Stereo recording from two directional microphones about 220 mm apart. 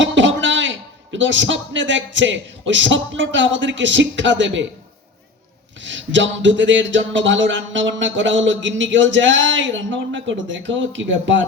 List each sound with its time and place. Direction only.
0.0 s a man's voice: 55° right (ahead or behind)
5.8 s speech: 60° right (ahead or behind)